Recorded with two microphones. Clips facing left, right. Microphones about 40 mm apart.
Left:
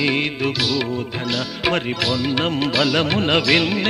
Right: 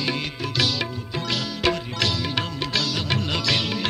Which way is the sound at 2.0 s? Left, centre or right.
Centre.